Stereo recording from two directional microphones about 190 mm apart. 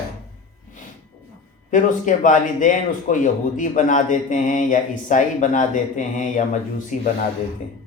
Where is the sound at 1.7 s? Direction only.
40° left (ahead or behind).